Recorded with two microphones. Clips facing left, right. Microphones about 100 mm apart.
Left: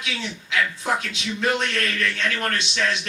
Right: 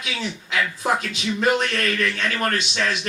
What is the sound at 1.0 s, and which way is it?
Speech, 45° right (ahead or behind).